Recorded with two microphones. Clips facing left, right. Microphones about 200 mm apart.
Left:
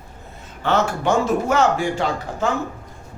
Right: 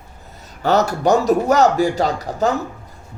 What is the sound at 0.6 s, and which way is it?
Speech, 40° right (ahead or behind).